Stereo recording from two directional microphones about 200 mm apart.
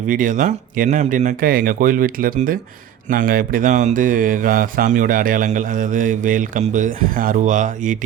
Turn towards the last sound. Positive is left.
turn(degrees=-40)  # may be behind; listen again after turning